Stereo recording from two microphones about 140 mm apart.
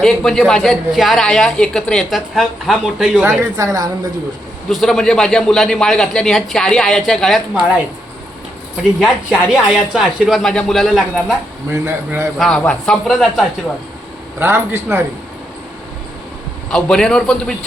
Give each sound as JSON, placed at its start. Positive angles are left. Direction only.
{"t": 0.0, "sound": "speech", "side_deg": 5}
{"t": 3.6, "sound": "speech", "side_deg": -25}
{"t": 4.7, "sound": "speech", "side_deg": 0}
{"t": 9.0, "sound": "speech", "side_deg": -5}
{"t": 11.7, "sound": "speech", "side_deg": -20}
{"t": 12.4, "sound": "speech", "side_deg": 5}
{"t": 14.3, "sound": "a man's voice", "side_deg": -15}
{"t": 16.7, "sound": "speech", "side_deg": 5}